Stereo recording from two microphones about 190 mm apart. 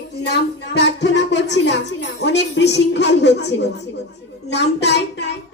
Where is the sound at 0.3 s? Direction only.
60° left (ahead or behind).